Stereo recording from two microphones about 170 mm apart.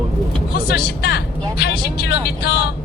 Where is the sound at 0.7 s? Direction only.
70° left (ahead or behind).